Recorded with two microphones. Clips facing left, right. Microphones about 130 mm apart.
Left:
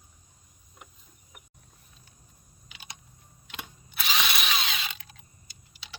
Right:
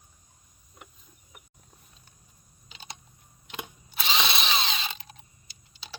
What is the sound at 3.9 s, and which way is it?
Drill, 25° right (ahead or behind).